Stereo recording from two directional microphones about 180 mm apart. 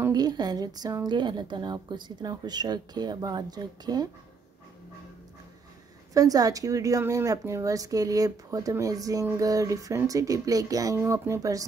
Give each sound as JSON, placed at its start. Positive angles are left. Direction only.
{"t": 0.0, "sound": "speech", "side_deg": -20}
{"t": 6.1, "sound": "speech", "side_deg": -20}